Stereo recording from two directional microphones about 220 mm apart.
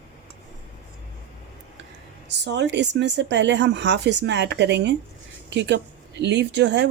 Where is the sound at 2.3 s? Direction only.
50° right (ahead or behind).